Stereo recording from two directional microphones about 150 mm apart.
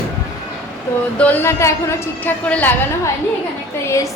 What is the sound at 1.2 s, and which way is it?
A woman's voice, 15° left (ahead or behind).